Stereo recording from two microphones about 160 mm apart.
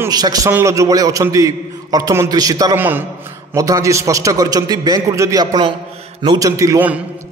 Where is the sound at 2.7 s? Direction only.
10° right (ahead or behind).